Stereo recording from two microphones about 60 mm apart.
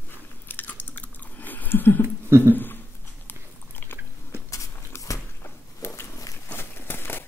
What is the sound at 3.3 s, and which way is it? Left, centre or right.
Biting, left.